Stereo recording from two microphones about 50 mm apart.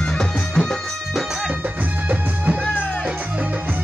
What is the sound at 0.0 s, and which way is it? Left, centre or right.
Music, centre.